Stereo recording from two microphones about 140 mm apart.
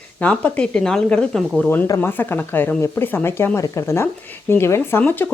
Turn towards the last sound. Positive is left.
turn(degrees=15)  # may be behind; listen again after turning